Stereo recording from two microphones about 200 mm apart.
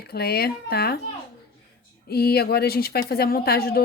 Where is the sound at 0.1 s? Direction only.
50° left (ahead or behind).